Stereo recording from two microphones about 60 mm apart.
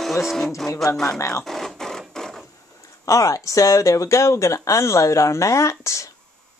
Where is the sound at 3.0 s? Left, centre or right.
Left.